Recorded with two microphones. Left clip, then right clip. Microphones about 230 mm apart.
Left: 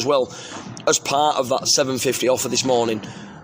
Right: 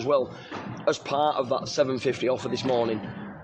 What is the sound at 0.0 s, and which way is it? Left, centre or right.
Speech, left.